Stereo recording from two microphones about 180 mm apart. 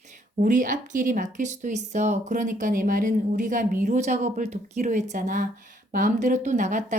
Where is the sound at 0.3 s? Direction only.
45° right (ahead or behind).